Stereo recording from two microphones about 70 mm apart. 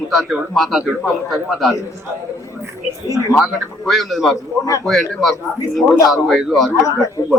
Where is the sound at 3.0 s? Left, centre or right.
Left.